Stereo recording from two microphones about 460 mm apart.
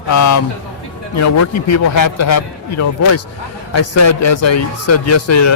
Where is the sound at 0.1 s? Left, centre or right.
Left.